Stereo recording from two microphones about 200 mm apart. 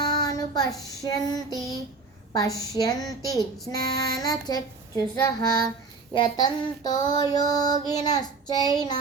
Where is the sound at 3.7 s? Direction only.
20° left (ahead or behind).